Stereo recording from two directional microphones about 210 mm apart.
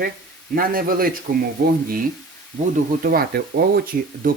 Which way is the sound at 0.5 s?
45° right (ahead or behind).